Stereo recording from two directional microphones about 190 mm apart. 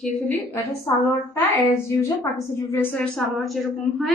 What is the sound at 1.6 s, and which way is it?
A woman's voice, 15° left (ahead or behind).